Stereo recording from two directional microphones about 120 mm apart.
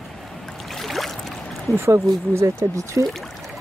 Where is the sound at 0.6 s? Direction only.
Centre (ahead or behind).